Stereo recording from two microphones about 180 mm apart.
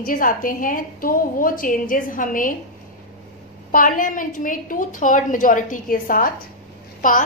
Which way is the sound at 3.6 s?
50° left (ahead or behind).